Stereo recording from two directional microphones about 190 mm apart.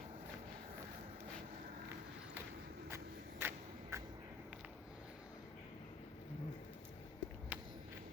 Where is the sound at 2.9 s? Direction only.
10° right (ahead or behind).